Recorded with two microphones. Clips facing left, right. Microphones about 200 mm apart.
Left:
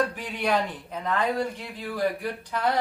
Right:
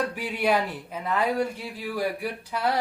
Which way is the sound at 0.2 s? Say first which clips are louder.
Right 2 dB; 10° right (ahead or behind).